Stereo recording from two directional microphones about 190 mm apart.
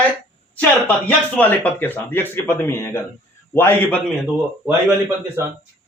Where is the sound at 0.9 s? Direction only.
10° left (ahead or behind).